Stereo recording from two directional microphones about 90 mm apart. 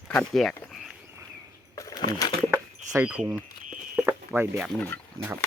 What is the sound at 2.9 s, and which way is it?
Speech, 30° right (ahead or behind).